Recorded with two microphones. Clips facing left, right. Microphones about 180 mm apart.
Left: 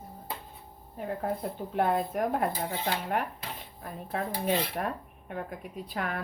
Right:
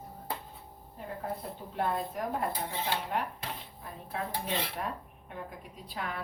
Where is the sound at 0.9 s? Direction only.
60° left (ahead or behind).